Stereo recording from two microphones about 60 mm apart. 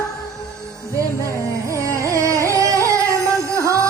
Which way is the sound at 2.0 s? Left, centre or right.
Right.